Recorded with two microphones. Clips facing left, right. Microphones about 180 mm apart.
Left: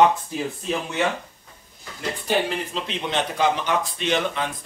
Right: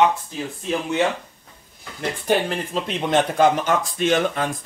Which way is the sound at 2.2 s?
50° right (ahead or behind).